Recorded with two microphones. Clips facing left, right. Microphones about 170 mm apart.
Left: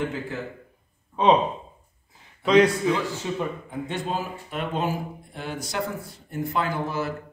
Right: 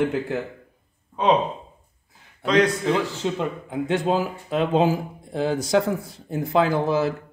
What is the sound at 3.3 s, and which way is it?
Speech, 90° right.